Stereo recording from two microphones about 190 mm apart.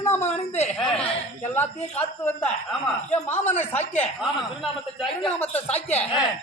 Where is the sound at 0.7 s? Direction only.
5° left (ahead or behind).